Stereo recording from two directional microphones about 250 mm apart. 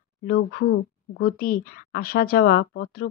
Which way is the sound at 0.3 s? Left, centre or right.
Left.